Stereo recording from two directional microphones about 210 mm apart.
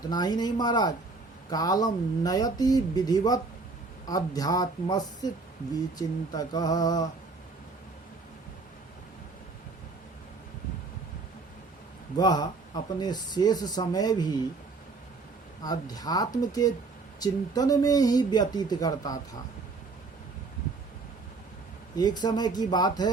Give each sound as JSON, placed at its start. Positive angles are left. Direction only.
{"t": 0.1, "sound": "speech", "side_deg": 20}
{"t": 12.1, "sound": "speech", "side_deg": 20}
{"t": 15.6, "sound": "speech", "side_deg": 20}
{"t": 21.9, "sound": "speech", "side_deg": 20}